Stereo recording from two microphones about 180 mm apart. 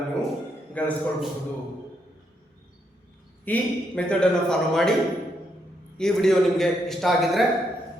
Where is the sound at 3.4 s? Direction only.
5° left (ahead or behind).